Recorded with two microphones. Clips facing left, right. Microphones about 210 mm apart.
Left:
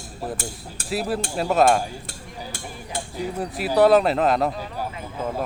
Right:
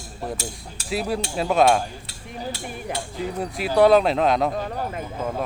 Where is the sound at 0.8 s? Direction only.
Centre (ahead or behind).